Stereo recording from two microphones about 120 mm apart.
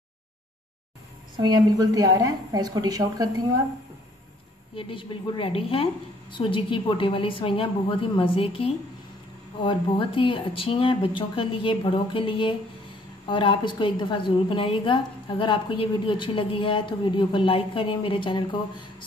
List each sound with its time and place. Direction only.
1.4 s a woman's voice: 35° right (ahead or behind)
4.7 s a woman's voice: 45° left (ahead or behind)